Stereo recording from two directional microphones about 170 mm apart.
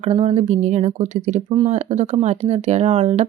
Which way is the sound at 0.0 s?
40° right (ahead or behind).